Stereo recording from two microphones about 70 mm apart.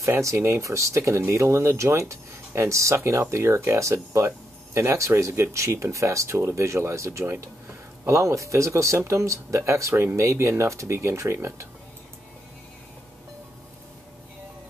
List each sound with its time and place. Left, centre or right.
0.0 s speech: right